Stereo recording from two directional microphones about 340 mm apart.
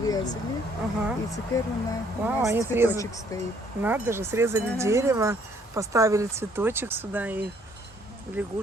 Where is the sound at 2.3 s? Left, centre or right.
Centre.